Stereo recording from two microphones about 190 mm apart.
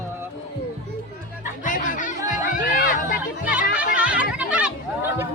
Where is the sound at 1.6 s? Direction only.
45° left (ahead or behind).